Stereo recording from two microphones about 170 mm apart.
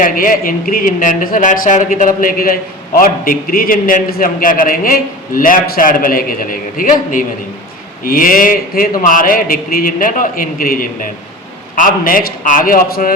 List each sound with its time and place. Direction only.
0.0 s a man's voice: 55° left (ahead or behind)